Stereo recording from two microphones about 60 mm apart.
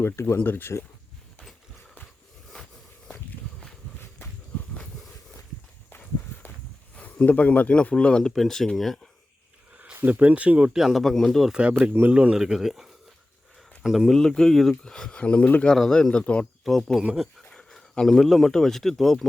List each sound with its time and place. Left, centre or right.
0.0 s speech: left
6.9 s speech: left; by 9.0 s centre
10.1 s speech: right
10.7 s speech: centre
11.0 s speech: centre
11.5 s speech: centre
12.4 s speech: centre
14.1 s speech: centre
15.2 s speech: left
15.6 s speech: centre
16.6 s speech: centre
17.5 s speech: centre